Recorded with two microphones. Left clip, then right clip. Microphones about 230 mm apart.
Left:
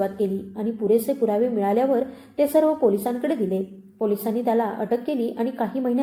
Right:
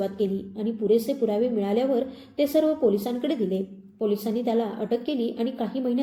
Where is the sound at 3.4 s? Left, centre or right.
Left.